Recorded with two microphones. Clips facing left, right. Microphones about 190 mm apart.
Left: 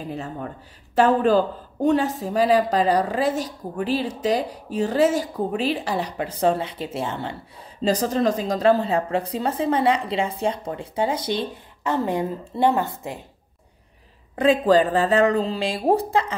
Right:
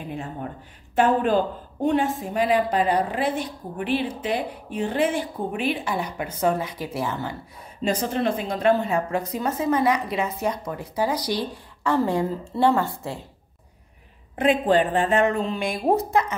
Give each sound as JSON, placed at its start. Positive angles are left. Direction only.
{"t": 0.0, "sound": "speech", "side_deg": 35}
{"t": 14.4, "sound": "speech", "side_deg": 35}